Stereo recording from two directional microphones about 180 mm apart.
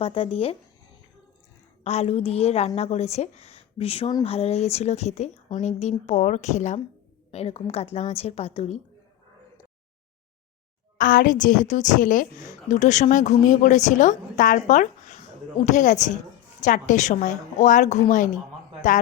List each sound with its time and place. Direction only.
0.0 s speech: 30° left (ahead or behind)
1.8 s speech: 35° left (ahead or behind)
10.9 s a woman's voice: 50° left (ahead or behind)